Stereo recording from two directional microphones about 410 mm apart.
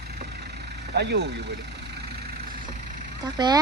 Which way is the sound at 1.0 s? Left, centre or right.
Right.